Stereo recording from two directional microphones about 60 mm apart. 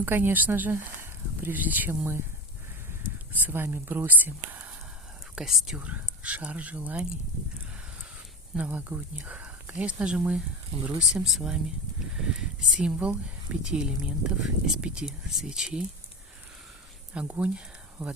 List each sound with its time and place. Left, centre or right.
0.0 s speech: right
3.3 s speech: right
5.3 s speech: centre
5.8 s speech: right
8.5 s speech: right
17.2 s speech: right